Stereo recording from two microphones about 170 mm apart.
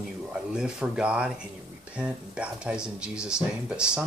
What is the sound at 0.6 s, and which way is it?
Speech, 5° right (ahead or behind).